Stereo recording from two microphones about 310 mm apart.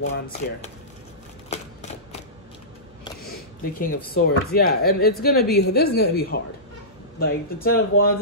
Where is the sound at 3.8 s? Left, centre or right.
Left.